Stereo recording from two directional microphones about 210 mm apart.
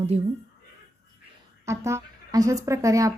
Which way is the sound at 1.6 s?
15° right (ahead or behind).